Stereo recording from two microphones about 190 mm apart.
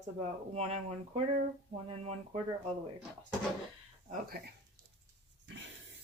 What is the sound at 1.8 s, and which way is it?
Speech, 30° right (ahead or behind).